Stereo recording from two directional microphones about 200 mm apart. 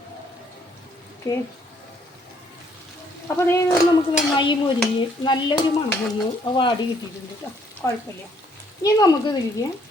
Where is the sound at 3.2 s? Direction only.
15° left (ahead or behind).